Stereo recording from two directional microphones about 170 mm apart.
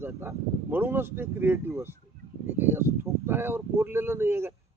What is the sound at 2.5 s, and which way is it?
Speech, 10° right (ahead or behind).